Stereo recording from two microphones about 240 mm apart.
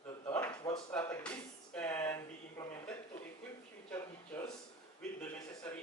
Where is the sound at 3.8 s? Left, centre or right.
Centre.